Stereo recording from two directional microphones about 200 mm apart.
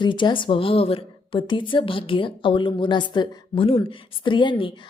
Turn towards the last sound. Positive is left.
turn(degrees=25)  # may be behind; listen again after turning